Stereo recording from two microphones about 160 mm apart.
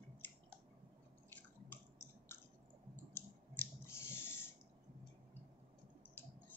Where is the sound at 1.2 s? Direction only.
10° left (ahead or behind).